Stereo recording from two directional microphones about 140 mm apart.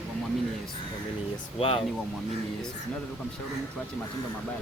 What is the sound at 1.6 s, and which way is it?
Speech, 40° left (ahead or behind).